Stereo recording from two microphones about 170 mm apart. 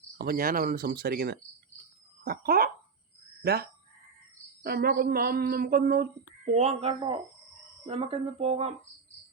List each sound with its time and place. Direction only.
0.2 s speech: 60° right (ahead or behind)
6.4 s speech: 40° right (ahead or behind)